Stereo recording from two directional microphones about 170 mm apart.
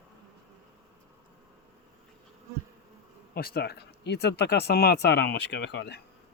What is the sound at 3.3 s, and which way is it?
Speech, 65° left (ahead or behind).